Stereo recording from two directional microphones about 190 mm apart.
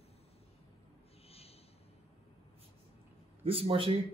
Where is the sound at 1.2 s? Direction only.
30° left (ahead or behind).